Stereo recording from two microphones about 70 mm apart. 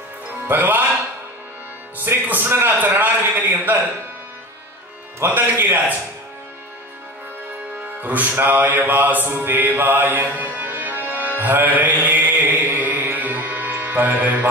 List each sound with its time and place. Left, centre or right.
0.5 s a man's voice: right
2.0 s a man's voice: right
5.2 s a man's voice: right
8.0 s music: right